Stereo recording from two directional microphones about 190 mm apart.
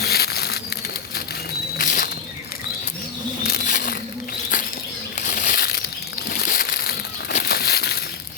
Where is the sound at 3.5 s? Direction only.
50° left (ahead or behind).